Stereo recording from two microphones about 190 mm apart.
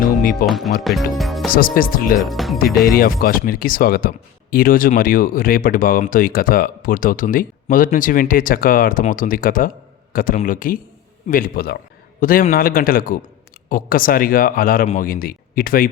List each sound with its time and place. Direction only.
0.0 s music: 45° left (ahead or behind)
0.4 s speech: centre (ahead or behind)
1.5 s speech: 50° left (ahead or behind)
2.2 s speech: centre (ahead or behind)
2.8 s speech: 50° left (ahead or behind)